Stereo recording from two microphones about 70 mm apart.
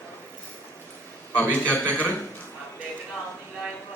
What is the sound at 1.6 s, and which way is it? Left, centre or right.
Speech, centre.